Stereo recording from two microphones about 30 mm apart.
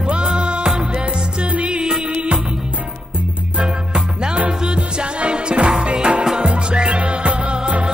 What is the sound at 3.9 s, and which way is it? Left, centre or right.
Music, right.